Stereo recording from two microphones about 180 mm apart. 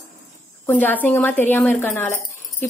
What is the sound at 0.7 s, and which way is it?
A woman's voice, 10° left (ahead or behind).